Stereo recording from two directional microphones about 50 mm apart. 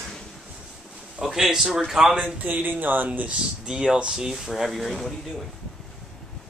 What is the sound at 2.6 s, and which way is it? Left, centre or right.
Speech, right.